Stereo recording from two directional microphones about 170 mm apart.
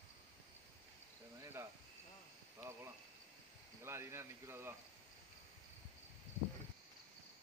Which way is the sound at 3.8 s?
15° right (ahead or behind).